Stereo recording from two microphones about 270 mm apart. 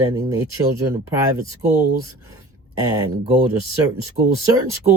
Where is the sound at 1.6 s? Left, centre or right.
Right.